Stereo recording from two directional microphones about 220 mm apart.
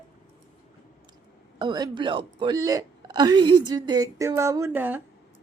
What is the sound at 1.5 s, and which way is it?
Speech, 20° right (ahead or behind).